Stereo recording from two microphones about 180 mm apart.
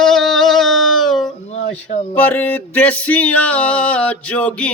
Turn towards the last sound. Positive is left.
turn(degrees=10)  # may be behind; listen again after turning